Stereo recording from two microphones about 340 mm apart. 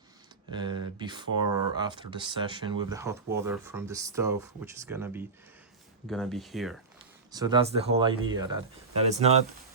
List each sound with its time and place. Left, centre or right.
0.5 s speech: centre
7.3 s speech: centre